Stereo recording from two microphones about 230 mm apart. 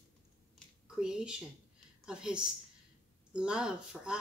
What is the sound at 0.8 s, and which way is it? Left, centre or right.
A woman's voice, centre.